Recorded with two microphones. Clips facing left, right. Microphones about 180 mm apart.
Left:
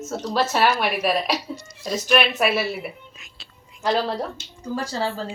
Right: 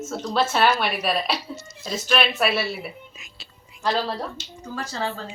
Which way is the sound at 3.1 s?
Centre (ahead or behind).